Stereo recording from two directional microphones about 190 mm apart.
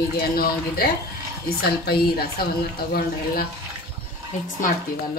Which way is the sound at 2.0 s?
55° left (ahead or behind).